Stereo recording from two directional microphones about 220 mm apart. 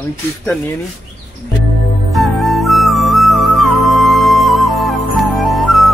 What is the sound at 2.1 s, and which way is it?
Flute, centre (ahead or behind).